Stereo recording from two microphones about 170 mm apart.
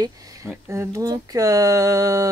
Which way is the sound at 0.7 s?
15° right (ahead or behind).